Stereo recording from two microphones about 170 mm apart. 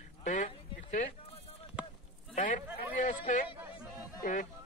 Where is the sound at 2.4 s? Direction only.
50° left (ahead or behind).